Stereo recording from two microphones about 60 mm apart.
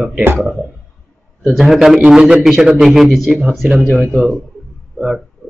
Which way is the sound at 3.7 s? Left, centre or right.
Centre.